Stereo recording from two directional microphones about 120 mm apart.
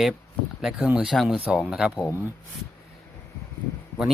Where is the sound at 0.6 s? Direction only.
5° right (ahead or behind).